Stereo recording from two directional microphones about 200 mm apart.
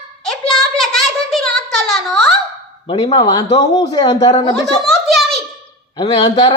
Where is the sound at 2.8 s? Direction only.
20° left (ahead or behind).